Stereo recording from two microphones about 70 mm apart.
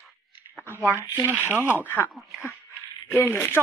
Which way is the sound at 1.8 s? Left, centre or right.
Left.